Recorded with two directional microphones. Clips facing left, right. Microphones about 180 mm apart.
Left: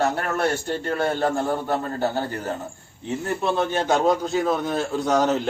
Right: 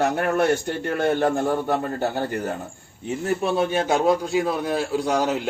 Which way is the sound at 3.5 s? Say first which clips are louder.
Left 1 dB; 10° right (ahead or behind).